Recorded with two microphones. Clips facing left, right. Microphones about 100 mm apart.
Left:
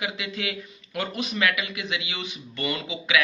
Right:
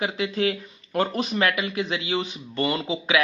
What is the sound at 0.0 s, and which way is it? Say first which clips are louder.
A man's voice: right 7 dB; 35° right (ahead or behind).